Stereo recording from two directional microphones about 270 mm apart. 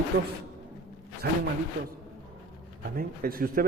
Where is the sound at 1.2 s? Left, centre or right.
Right.